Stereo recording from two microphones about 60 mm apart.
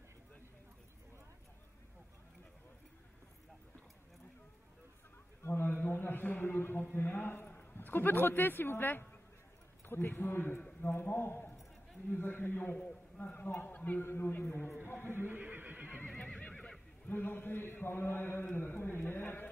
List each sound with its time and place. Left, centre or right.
5.4 s a sound: left
9.8 s a man's voice: left
12.7 s a man's voice: left
14.0 s a man's voice: left
15.0 s neigh: right
16.3 s neigh: left
17.1 s a man's voice: left